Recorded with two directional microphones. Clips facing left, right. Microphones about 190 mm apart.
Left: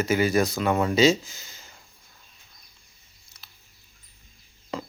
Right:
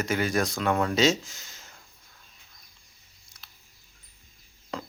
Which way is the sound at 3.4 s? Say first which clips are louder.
Even; centre (ahead or behind).